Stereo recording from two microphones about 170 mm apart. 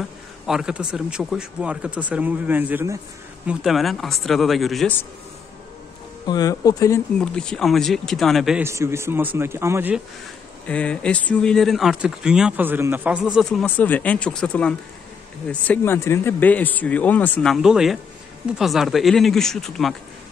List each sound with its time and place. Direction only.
0.5 s speech: 5° right (ahead or behind)
3.4 s speech: centre (ahead or behind)
6.2 s speech: 20° left (ahead or behind)
7.2 s speech: 5° left (ahead or behind)
8.6 s speech: 15° right (ahead or behind)
10.7 s speech: 5° left (ahead or behind)